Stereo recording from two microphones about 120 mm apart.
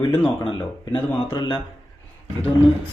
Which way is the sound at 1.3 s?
40° left (ahead or behind).